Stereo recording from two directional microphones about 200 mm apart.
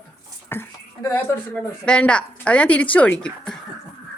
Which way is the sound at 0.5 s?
10° left (ahead or behind).